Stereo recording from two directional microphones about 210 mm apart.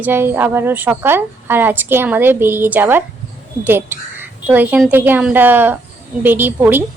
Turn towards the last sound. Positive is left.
turn(degrees=-10)  # may be behind; listen again after turning